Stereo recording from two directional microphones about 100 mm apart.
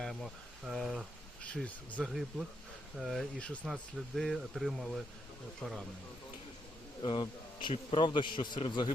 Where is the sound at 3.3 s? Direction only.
10° left (ahead or behind).